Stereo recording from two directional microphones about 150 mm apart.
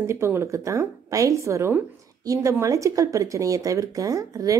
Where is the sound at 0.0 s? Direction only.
20° right (ahead or behind).